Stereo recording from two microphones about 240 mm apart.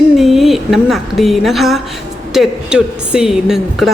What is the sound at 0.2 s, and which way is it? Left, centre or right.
A woman's voice, centre.